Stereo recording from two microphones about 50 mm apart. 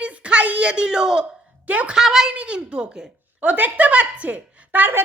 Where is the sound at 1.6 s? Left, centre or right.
Right.